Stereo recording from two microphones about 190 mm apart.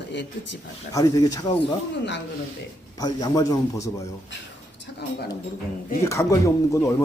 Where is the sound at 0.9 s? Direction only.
20° left (ahead or behind).